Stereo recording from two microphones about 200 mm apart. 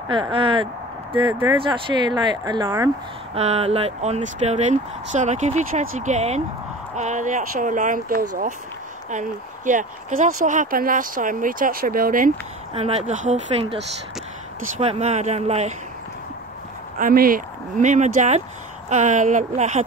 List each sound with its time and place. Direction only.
0.1 s speech: 25° right (ahead or behind)
1.7 s speech: 20° right (ahead or behind)
3.3 s speech: 30° right (ahead or behind)
12.7 s speech: 30° right (ahead or behind)
14.8 s speech: 30° right (ahead or behind)
17.0 s speech: 45° right (ahead or behind)